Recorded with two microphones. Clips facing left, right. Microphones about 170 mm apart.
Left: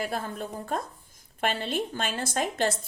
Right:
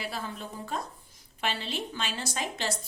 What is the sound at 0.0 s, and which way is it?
A woman's voice, 50° left (ahead or behind).